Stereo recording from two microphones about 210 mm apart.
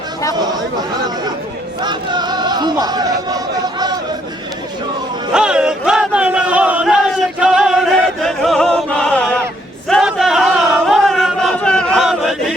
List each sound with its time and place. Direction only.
0.3 s speech: 20° right (ahead or behind)
1.8 s chatter: 20° right (ahead or behind)
5.3 s a sound: 5° right (ahead or behind)
9.9 s chant: centre (ahead or behind)